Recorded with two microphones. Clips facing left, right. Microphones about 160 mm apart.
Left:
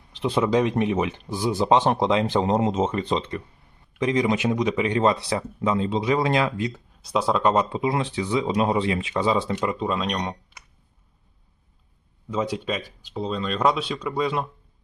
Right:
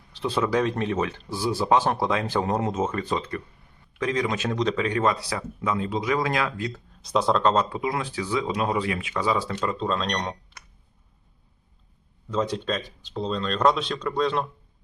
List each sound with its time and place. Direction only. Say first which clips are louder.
0.1 s speech: left 3 dB; 15° left (ahead or behind)
7.0 s speech: even; 5° left (ahead or behind)
12.3 s speech: even; 10° left (ahead or behind)